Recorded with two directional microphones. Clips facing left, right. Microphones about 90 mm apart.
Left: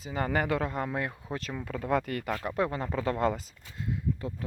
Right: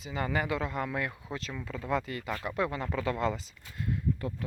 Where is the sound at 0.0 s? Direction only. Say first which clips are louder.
Left 2 dB; 40° left (ahead or behind).